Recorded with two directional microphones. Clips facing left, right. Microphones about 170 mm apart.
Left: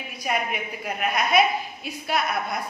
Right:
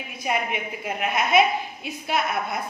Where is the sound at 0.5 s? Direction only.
25° right (ahead or behind).